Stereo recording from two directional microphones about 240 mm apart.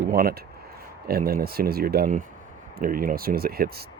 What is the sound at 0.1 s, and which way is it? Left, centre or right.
Speech, right.